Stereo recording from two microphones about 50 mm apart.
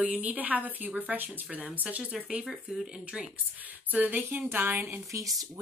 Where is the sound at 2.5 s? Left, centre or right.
Centre.